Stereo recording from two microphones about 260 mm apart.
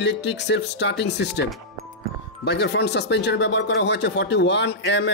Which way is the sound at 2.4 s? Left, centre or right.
Left.